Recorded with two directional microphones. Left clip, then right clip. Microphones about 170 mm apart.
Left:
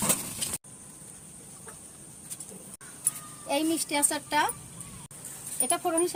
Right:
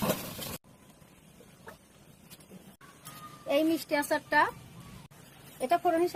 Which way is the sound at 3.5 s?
15° right (ahead or behind).